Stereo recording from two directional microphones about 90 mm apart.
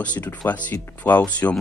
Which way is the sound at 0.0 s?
15° left (ahead or behind).